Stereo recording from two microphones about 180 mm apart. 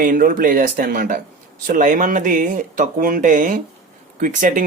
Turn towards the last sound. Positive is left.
turn(degrees=-45)  # may be behind; listen again after turning